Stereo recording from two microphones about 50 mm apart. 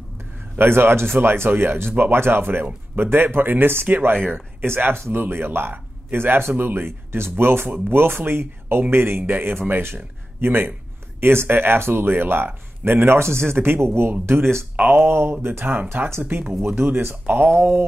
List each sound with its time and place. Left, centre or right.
0.6 s speech: right
15.0 s speech: right